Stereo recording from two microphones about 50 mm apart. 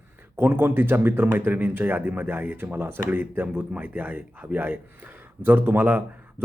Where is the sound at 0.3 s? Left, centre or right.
Right.